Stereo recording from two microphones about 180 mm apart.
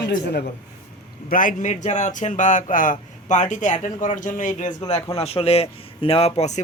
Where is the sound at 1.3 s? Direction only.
50° left (ahead or behind).